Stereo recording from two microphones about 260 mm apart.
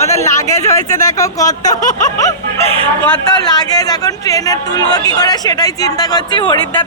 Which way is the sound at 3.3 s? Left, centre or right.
Centre.